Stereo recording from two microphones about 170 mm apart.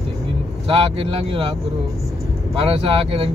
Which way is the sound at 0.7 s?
35° right (ahead or behind).